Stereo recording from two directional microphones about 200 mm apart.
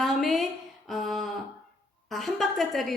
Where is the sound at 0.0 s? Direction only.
Centre (ahead or behind).